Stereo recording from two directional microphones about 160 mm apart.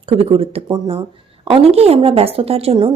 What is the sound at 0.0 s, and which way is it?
A woman's voice, 35° right (ahead or behind).